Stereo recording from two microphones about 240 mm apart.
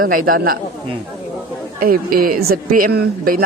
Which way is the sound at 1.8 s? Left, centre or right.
Right.